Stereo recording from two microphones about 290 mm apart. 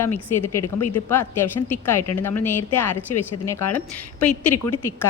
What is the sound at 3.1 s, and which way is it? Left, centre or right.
Speech, left.